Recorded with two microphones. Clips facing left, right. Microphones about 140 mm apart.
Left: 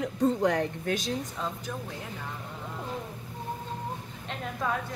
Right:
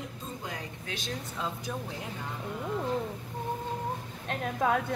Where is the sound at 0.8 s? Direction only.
40° left (ahead or behind).